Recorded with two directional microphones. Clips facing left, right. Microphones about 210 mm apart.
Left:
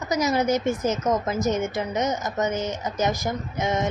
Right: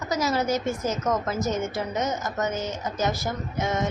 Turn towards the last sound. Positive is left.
turn(degrees=20)  # may be behind; listen again after turning